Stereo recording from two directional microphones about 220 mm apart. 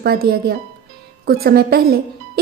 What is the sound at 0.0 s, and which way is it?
Speech, 45° right (ahead or behind).